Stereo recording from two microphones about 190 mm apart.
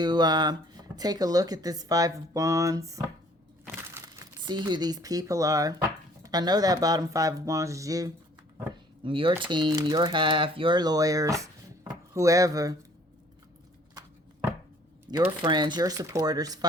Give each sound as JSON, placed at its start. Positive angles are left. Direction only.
{"t": 0.0, "sound": "speech", "side_deg": -20}
{"t": 15.1, "sound": "speech", "side_deg": -25}